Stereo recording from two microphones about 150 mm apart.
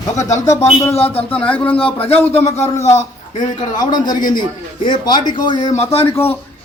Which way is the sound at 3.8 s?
25° left (ahead or behind).